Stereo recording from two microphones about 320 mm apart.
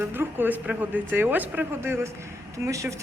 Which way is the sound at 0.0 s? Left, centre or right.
Centre.